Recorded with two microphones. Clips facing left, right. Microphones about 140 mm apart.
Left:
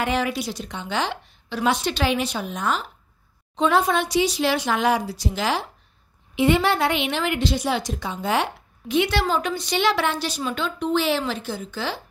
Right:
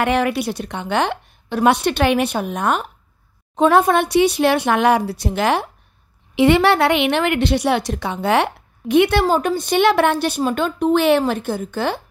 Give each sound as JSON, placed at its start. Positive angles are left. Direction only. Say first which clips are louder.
{"t": 0.0, "sound": "a woman's voice", "louder": "right 6 dB", "side_deg": -60}
{"t": 6.3, "sound": "a woman's voice", "louder": "right 6 dB", "side_deg": -70}